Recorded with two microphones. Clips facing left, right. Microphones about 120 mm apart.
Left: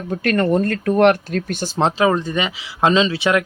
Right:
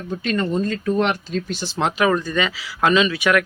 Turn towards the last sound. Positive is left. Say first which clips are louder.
# left 1 dB
turn(degrees=25)  # may be behind; listen again after turning